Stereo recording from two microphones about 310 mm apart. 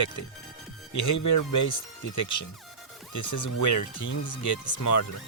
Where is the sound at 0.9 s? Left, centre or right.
Left.